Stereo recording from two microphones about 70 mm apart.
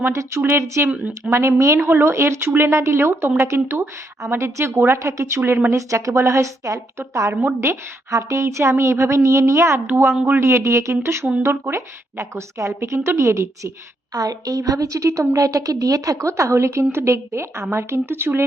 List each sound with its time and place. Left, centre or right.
0.1 s a woman's voice: right
0.9 s speech: centre
1.3 s a woman's voice: right
1.9 s a woman's voice: right
14.1 s a woman's voice: right